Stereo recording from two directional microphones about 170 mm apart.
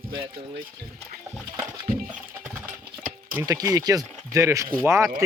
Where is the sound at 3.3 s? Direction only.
15° right (ahead or behind).